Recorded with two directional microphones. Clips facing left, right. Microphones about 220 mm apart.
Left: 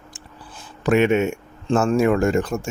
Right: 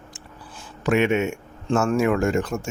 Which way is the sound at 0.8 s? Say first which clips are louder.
Left 3 dB; 35° left (ahead or behind).